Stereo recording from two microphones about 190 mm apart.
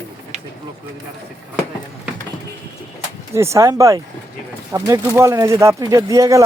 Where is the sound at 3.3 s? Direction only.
15° right (ahead or behind).